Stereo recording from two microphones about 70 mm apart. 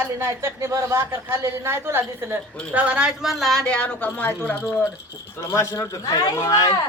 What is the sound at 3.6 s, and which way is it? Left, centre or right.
Speech, centre.